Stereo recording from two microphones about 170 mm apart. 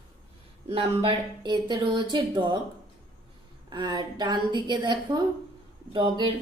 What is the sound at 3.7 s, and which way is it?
A woman's voice, 25° right (ahead or behind).